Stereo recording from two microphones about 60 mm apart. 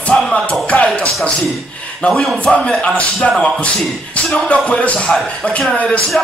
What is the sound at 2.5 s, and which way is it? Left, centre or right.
Speech, centre.